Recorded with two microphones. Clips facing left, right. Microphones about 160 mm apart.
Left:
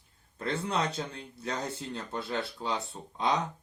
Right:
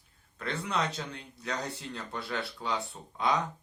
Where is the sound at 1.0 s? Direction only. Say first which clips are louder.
Left 3 dB; 30° left (ahead or behind).